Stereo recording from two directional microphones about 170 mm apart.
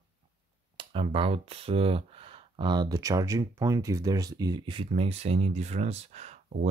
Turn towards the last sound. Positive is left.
turn(degrees=-40)  # may be behind; listen again after turning